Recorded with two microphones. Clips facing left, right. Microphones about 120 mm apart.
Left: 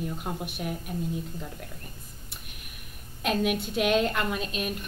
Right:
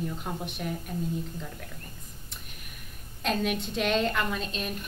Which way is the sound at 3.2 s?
5° left (ahead or behind).